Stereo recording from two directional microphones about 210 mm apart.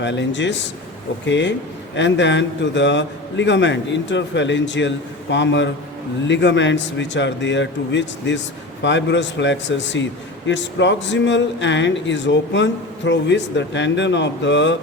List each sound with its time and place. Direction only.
0.0 s a man's voice: 60° left (ahead or behind)